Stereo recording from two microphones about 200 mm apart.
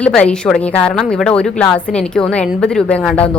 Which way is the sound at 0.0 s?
5° left (ahead or behind).